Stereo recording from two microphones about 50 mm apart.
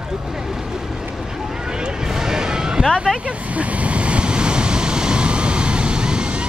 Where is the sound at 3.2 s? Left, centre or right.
Right.